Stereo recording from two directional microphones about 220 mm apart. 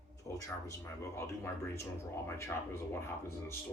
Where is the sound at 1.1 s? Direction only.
15° left (ahead or behind).